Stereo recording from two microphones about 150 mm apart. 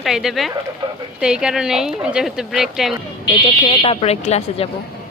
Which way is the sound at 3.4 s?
35° left (ahead or behind).